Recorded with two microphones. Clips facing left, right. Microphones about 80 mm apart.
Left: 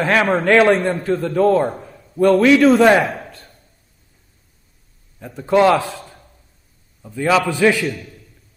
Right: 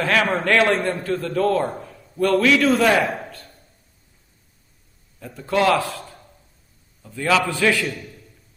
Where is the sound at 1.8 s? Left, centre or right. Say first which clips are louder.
Left 6 dB; centre.